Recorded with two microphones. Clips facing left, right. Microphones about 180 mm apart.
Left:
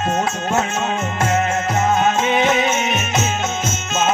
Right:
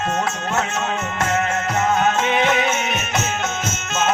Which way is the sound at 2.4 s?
15° left (ahead or behind).